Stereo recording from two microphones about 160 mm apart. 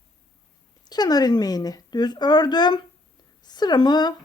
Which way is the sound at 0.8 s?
25° left (ahead or behind).